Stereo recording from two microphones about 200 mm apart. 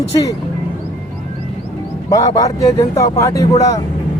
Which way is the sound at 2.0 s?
15° left (ahead or behind).